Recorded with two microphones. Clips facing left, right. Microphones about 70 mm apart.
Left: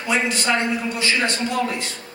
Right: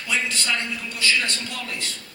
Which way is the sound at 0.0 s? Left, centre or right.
Left.